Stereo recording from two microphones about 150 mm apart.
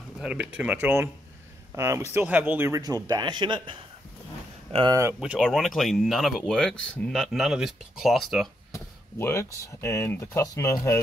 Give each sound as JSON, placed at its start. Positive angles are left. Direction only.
{"t": 0.2, "sound": "speech", "side_deg": -5}
{"t": 2.8, "sound": "speech", "side_deg": -25}
{"t": 5.2, "sound": "speech", "side_deg": -5}
{"t": 8.7, "sound": "speech", "side_deg": 20}